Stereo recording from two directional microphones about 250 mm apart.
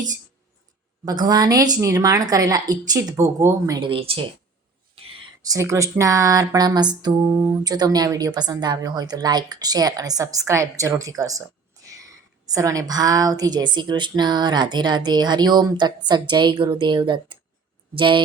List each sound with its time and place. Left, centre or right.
1.0 s a woman's voice: centre